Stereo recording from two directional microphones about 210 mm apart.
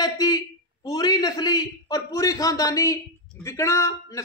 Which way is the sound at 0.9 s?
20° left (ahead or behind).